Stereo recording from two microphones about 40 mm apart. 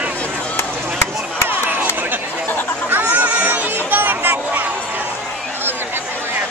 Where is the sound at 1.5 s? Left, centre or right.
Right.